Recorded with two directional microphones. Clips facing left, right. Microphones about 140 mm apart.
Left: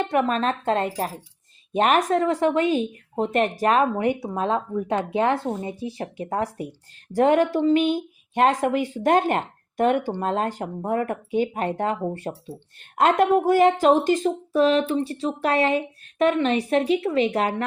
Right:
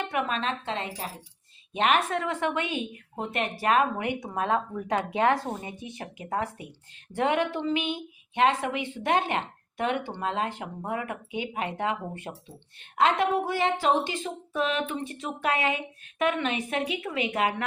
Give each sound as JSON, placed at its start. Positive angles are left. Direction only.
{"t": 0.0, "sound": "speech", "side_deg": 40}